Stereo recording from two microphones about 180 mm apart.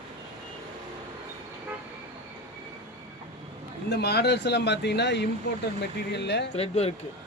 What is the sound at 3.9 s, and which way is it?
Speech, 65° left (ahead or behind).